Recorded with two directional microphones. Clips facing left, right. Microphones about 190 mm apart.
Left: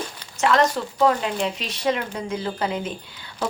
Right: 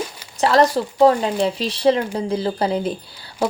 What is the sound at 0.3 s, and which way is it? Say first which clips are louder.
Speech: right 4 dB; 35° right (ahead or behind).